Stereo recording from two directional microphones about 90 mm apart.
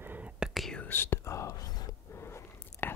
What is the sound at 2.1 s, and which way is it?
Biting, 30° left (ahead or behind).